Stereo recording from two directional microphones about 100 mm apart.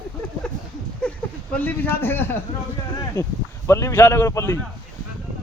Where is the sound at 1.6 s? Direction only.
20° left (ahead or behind).